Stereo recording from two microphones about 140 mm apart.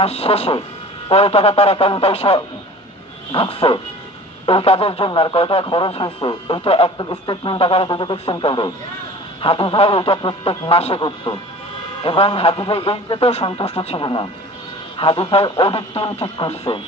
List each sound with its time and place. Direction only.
0.0 s a man's voice: 45° left (ahead or behind)